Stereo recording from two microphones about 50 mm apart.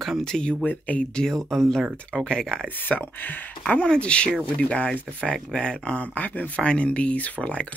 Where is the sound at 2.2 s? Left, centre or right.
Centre.